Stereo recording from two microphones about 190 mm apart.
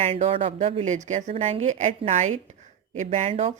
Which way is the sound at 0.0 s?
35° right (ahead or behind).